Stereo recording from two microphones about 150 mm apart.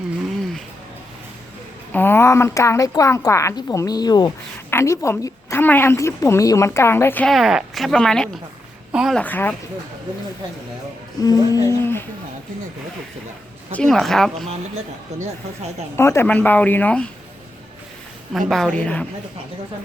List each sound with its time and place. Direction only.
1.9 s a woman's voice: 15° left (ahead or behind)
7.3 s speech: centre (ahead or behind)
9.1 s a woman's voice: 10° left (ahead or behind)
11.2 s a woman's voice: 25° left (ahead or behind)
13.7 s speech: centre (ahead or behind)
15.1 s speech: 50° right (ahead or behind)
16.0 s a woman's voice: 15° left (ahead or behind)
18.3 s speech: centre (ahead or behind)